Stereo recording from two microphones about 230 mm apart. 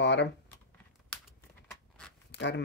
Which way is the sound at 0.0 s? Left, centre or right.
Left.